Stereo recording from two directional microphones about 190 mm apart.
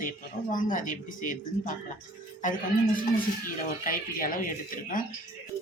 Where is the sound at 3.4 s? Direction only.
45° left (ahead or behind).